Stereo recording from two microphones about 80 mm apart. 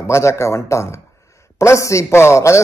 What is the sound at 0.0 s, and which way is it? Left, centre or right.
Speech, left.